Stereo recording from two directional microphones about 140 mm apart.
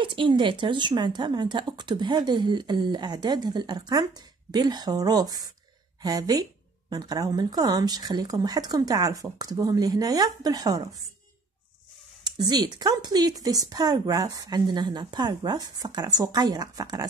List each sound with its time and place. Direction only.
0.0 s speech: 35° right (ahead or behind)
12.3 s speech: 30° right (ahead or behind)